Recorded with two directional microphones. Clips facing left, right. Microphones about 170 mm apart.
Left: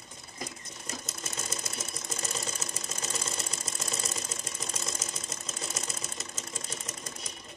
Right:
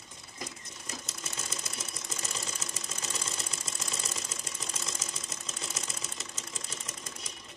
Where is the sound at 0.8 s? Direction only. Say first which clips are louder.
Left 3 dB; 45° left (ahead or behind).